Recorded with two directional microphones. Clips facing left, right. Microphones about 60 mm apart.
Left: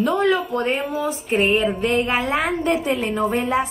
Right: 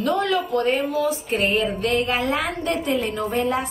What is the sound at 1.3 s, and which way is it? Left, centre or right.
Speech, centre.